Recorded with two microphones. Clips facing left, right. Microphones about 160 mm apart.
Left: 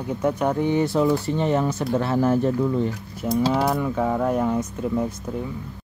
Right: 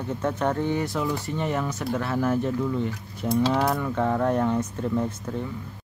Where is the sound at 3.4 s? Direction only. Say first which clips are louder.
Left 2 dB; 10° left (ahead or behind).